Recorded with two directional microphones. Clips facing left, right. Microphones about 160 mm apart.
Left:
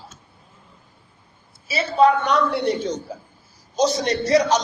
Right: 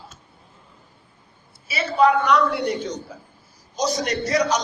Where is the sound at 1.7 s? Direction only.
30° left (ahead or behind).